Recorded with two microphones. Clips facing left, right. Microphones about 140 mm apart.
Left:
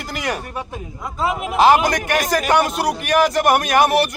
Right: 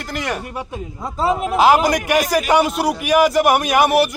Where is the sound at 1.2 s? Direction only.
35° right (ahead or behind).